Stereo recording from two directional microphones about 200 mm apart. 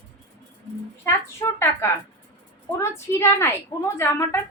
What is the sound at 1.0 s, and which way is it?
A woman's voice, 10° left (ahead or behind).